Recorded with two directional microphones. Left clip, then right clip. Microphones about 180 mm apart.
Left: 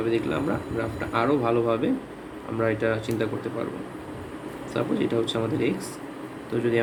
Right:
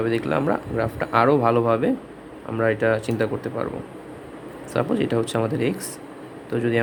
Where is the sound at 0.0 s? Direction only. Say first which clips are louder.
Right 3 dB; 55° right (ahead or behind).